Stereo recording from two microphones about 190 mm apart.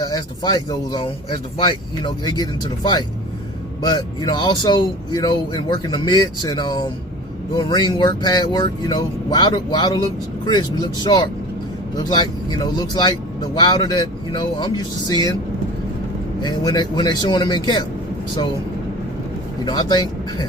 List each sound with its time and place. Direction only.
0.0 s speech: 20° left (ahead or behind)
16.4 s speech: 20° left (ahead or behind)
19.6 s speech: 20° left (ahead or behind)